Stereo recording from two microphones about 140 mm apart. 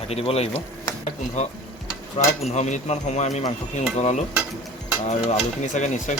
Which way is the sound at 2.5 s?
55° left (ahead or behind).